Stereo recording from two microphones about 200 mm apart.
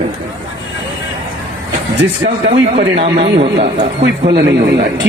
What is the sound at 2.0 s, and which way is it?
A man's voice, 30° right (ahead or behind).